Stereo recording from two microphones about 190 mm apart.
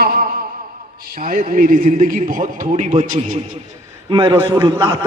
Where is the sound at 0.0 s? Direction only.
50° right (ahead or behind).